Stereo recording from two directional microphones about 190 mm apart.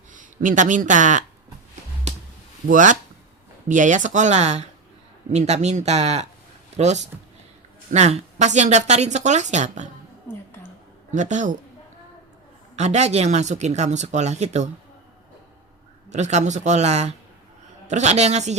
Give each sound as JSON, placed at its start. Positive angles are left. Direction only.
{"t": 0.1, "sound": "speech", "side_deg": -45}
{"t": 2.6, "sound": "speech", "side_deg": -40}
{"t": 11.1, "sound": "speech", "side_deg": -40}
{"t": 12.7, "sound": "speech", "side_deg": -35}
{"t": 16.0, "sound": "speech", "side_deg": -35}